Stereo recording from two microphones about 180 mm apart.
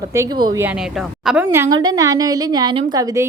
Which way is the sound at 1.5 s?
15° right (ahead or behind).